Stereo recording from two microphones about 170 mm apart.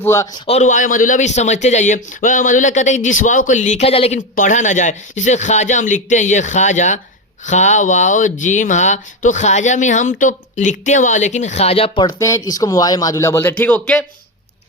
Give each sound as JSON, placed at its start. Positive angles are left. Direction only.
{"t": 0.0, "sound": "speech", "side_deg": 15}
{"t": 0.4, "sound": "speech", "side_deg": 40}
{"t": 4.4, "sound": "speech", "side_deg": 45}
{"t": 12.0, "sound": "speech", "side_deg": 20}